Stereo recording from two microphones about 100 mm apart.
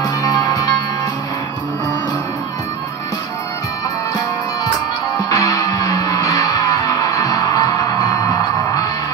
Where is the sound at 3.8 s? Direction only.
40° left (ahead or behind).